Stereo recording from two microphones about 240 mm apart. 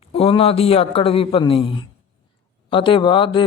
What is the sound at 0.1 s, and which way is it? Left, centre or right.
Speech, left.